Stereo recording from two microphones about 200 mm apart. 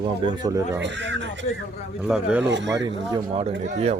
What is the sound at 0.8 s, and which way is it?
Speech, 60° right (ahead or behind).